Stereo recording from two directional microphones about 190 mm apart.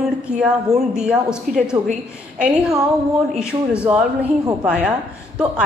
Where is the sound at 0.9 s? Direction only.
5° right (ahead or behind).